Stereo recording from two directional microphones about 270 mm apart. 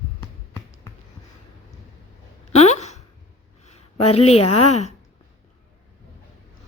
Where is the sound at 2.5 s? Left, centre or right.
Left.